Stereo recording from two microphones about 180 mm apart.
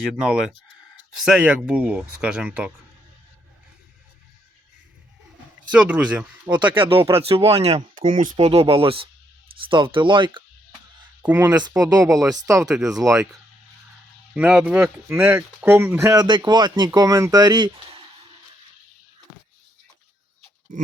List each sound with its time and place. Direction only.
0.2 s speech: 5° right (ahead or behind)
5.7 s speech: 5° right (ahead or behind)
6.7 s speech: 30° right (ahead or behind)
11.2 s speech: 10° right (ahead or behind)
12.6 s speech: 5° right (ahead or behind)
13.0 s speech: 15° right (ahead or behind)
14.3 s speech: 5° right (ahead or behind)